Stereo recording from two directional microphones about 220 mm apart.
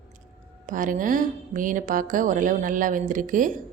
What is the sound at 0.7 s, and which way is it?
A woman's voice, 35° right (ahead or behind).